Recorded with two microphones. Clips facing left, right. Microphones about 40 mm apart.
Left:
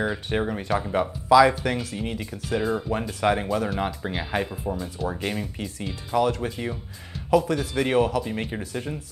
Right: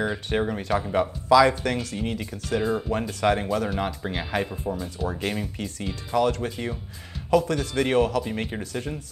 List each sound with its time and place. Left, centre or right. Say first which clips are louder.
0.0 s speech: even; centre